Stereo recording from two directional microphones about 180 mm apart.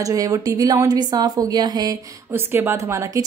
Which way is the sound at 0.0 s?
20° right (ahead or behind).